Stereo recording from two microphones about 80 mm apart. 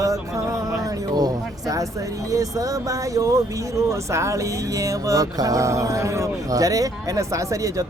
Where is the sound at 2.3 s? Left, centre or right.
Right.